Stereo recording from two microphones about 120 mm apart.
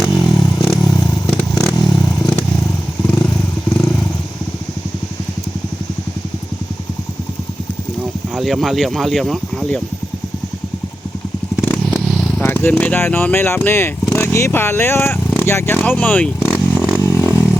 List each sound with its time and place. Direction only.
0.0 s vehicle: centre (ahead or behind)
0.6 s motorcycle: 5° left (ahead or behind)
3.8 s vehicle: 5° left (ahead or behind)
8.4 s speech: centre (ahead or behind)
11.9 s vehicle: centre (ahead or behind)
12.4 s speech: 20° left (ahead or behind)
17.1 s a sound: 20° right (ahead or behind)